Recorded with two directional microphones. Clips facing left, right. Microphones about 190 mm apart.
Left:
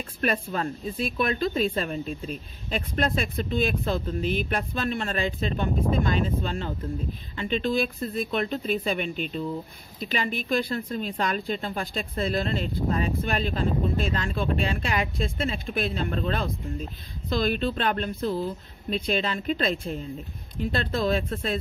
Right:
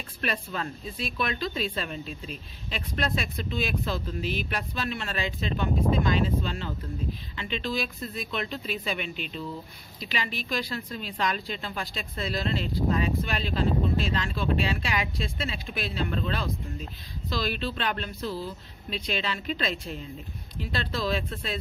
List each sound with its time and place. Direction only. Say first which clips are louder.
0.2 s speech: left 5 dB; 40° left (ahead or behind)